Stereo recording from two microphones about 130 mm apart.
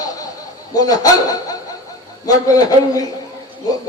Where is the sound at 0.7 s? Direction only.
30° left (ahead or behind).